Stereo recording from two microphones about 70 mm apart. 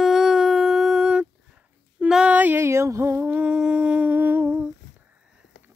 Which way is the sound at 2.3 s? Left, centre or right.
Right.